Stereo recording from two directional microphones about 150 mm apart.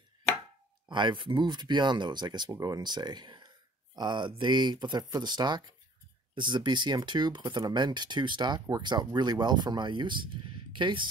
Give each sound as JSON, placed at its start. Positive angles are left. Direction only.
{"t": 0.8, "sound": "speech", "side_deg": -30}